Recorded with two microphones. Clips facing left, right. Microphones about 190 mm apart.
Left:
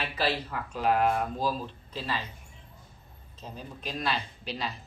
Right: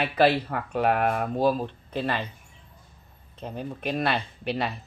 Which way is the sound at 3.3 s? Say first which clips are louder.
Right 8 dB; 60° right (ahead or behind).